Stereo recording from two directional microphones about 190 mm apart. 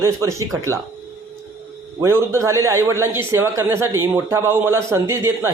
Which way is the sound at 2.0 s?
15° right (ahead or behind).